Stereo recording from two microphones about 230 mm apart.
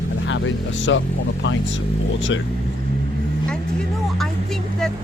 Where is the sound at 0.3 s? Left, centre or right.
Left.